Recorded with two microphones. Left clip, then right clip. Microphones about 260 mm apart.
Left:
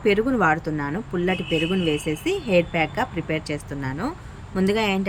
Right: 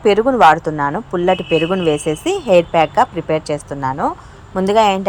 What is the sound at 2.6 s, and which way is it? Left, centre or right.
Speech, right.